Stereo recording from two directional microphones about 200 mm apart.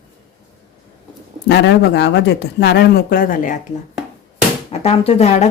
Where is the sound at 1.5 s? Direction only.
60° left (ahead or behind); by 3.6 s 40° left (ahead or behind).